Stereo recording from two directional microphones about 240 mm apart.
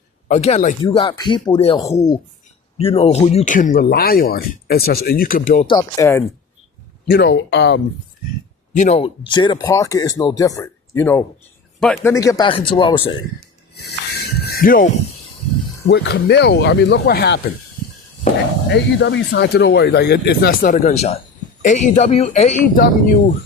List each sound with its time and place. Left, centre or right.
0.3 s speech: left
5.6 s speech: centre
7.1 s speech: left
8.7 s speech: left; by 12.1 s centre
12.1 s speech: centre
14.4 s music: left
15.9 s speech: left
18.7 s speech: left